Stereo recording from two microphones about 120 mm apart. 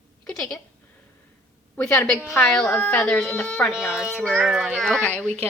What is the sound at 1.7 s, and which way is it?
Speech, 5° left (ahead or behind).